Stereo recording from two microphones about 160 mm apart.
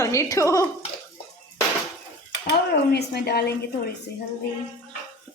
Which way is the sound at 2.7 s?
90° left.